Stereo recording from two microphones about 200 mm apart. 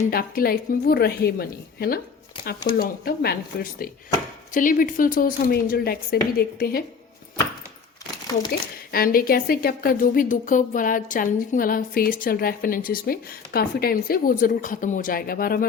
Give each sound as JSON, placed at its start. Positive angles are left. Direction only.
{"t": 0.1, "sound": "a woman's voice", "side_deg": 50}
{"t": 8.9, "sound": "a woman's voice", "side_deg": 45}